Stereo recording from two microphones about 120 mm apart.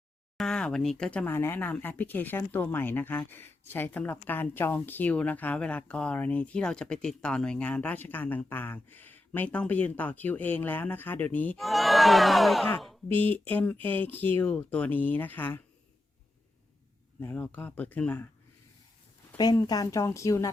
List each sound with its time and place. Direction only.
0.3 s speech: 5° left (ahead or behind)
11.5 s speech: centre (ahead or behind)
13.1 s speech: 15° left (ahead or behind)
17.2 s speech: 15° left (ahead or behind)
19.4 s a woman's voice: 35° left (ahead or behind)